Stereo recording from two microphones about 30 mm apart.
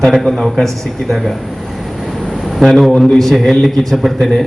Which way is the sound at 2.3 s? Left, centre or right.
Centre.